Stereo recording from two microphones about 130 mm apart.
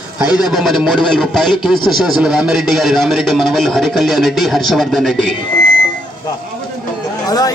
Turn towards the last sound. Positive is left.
turn(degrees=30)  # may be behind; listen again after turning